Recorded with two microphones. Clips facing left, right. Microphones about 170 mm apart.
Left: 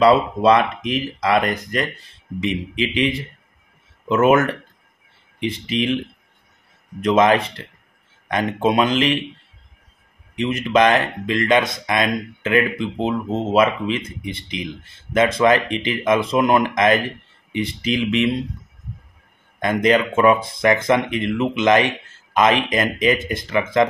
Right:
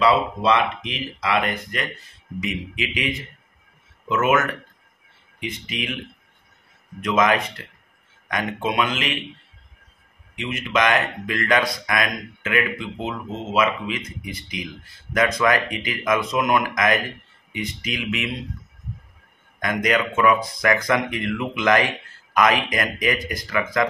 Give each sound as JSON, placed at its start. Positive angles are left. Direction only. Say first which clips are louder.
{"t": 0.0, "sound": "speech", "louder": "left 5 dB", "side_deg": 40}
{"t": 7.0, "sound": "speech", "louder": "left 5 dB", "side_deg": 30}
{"t": 10.3, "sound": "speech", "louder": "left 6 dB", "side_deg": 35}
{"t": 19.6, "sound": "speech", "louder": "left 5 dB", "side_deg": 30}